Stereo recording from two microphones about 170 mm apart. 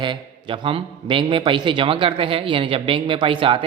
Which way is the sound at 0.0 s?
30° right (ahead or behind).